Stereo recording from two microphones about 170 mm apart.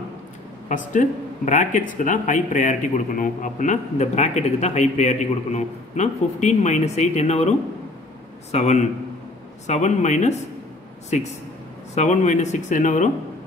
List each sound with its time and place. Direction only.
0.7 s a man's voice: 50° left (ahead or behind)